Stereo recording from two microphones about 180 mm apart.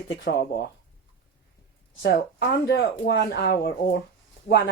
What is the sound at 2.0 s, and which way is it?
Speech, 70° left (ahead or behind).